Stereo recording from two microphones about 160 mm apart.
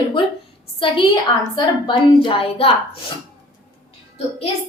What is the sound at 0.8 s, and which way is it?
A woman's voice, 30° left (ahead or behind).